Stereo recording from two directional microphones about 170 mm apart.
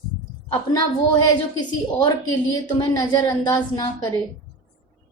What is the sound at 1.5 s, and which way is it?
A woman's voice, 25° left (ahead or behind).